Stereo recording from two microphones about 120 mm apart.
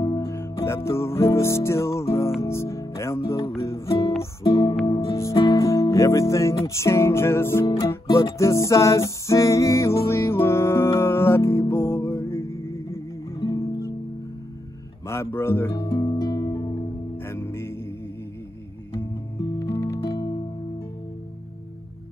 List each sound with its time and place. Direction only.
0.0 s music: 25° left (ahead or behind)
4.9 s speech: 25° left (ahead or behind)
8.2 s music: 25° left (ahead or behind)
15.0 s music: 20° left (ahead or behind)
15.9 s music: 40° left (ahead or behind)
17.3 s music: 20° left (ahead or behind)
19.6 s music: 25° left (ahead or behind)